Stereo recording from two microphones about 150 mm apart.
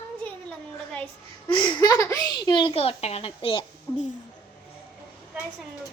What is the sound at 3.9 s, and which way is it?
Speech, 25° left (ahead or behind).